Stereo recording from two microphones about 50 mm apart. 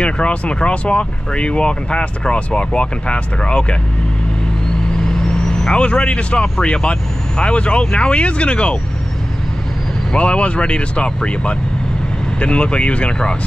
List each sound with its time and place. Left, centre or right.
0.0 s speech: left
5.0 s vehicle: centre
6.6 s speech: centre
10.1 s speech: left